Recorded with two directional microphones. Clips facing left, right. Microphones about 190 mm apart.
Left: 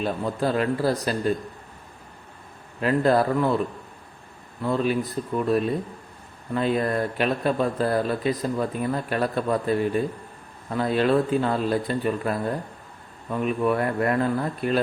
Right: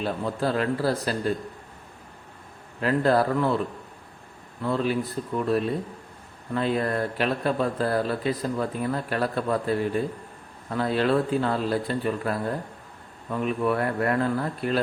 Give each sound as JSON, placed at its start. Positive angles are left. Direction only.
{"t": 0.0, "sound": "speech", "side_deg": 15}
{"t": 2.8, "sound": "speech", "side_deg": 15}
{"t": 4.6, "sound": "speech", "side_deg": 15}
{"t": 6.5, "sound": "speech", "side_deg": 15}